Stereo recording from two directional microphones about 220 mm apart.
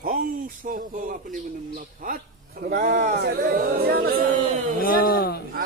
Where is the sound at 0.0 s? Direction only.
40° right (ahead or behind).